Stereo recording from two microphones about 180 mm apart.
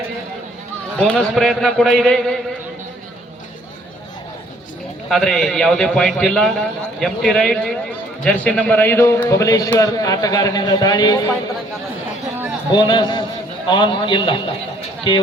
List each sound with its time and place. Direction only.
0.9 s a man's voice: 5° left (ahead or behind)
5.0 s a man's voice: centre (ahead or behind); by 11.3 s 20° left (ahead or behind)
12.7 s a man's voice: 25° left (ahead or behind)